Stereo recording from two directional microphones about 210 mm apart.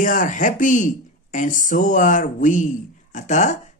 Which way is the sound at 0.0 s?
40° left (ahead or behind).